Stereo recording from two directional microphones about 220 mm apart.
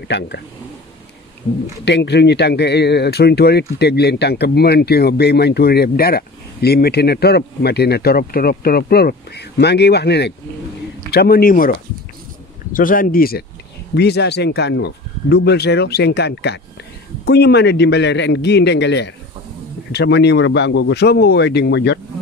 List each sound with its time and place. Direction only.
1.9 s speech: 50° left (ahead or behind)
12.7 s speech: 40° left (ahead or behind)